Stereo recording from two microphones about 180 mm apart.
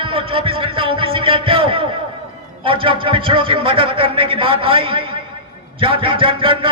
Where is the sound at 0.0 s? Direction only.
30° right (ahead or behind).